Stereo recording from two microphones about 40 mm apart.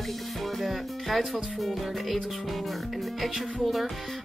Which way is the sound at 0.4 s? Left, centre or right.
Centre.